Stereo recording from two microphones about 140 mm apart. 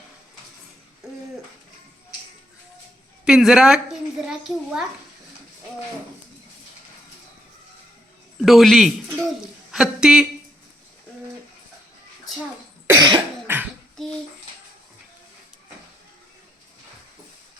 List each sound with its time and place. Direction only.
1.0 s a sound: 5° right (ahead or behind)
3.2 s speech: 5° right (ahead or behind)
8.4 s speech: centre (ahead or behind)
12.9 s cough: 30° right (ahead or behind)